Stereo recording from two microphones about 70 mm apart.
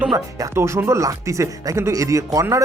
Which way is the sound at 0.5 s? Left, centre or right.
Right.